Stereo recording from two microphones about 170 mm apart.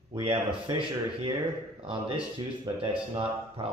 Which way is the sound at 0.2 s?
30° right (ahead or behind).